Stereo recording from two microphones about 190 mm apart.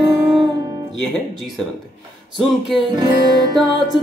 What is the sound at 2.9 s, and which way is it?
Music, 20° right (ahead or behind).